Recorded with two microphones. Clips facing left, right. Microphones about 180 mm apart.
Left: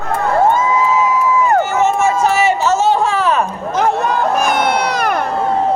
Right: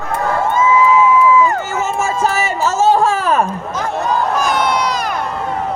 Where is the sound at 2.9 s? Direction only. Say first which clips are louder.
Right 1 dB; 45° right (ahead or behind).